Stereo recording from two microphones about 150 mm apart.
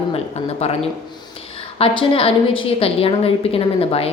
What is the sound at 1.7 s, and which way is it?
A woman's voice, 40° left (ahead or behind).